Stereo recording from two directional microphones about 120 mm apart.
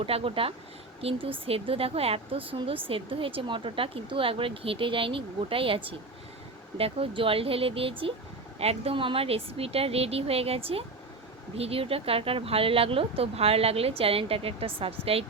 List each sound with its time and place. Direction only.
0.0 s speech: 50° right (ahead or behind)